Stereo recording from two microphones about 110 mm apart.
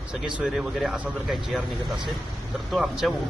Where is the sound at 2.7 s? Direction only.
5° right (ahead or behind).